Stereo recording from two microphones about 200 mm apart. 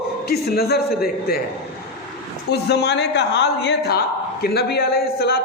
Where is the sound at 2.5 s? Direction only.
55° left (ahead or behind).